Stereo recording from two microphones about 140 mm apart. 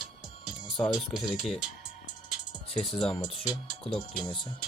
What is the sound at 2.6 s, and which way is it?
Speech, 45° left (ahead or behind).